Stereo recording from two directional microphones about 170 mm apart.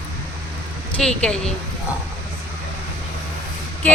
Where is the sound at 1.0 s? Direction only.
5° left (ahead or behind).